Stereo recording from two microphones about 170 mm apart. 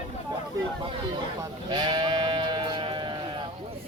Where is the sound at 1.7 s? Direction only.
25° right (ahead or behind).